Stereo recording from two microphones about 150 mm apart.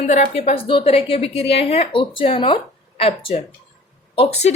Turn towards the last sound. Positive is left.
turn(degrees=45)  # may be behind; listen again after turning